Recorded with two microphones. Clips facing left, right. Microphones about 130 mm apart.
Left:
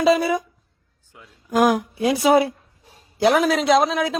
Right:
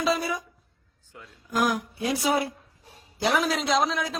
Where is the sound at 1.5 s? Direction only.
90° left.